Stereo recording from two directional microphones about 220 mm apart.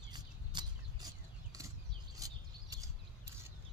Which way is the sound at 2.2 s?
15° right (ahead or behind).